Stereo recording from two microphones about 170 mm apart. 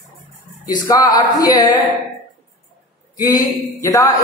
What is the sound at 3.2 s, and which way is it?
Speech, 20° left (ahead or behind).